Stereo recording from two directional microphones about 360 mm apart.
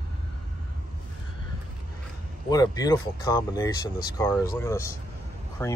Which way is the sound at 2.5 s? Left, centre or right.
Centre.